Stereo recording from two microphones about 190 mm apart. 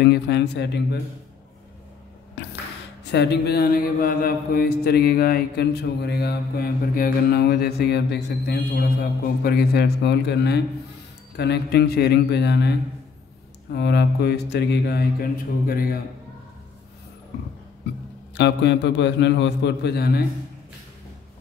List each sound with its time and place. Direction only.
0.0 s mantra: 60° left (ahead or behind)
3.0 s mantra: 65° left (ahead or behind)
15.6 s a man's voice: 50° left (ahead or behind)
18.3 s a man's voice: 70° left (ahead or behind)